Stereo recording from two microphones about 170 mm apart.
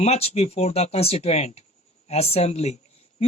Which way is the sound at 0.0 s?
35° left (ahead or behind).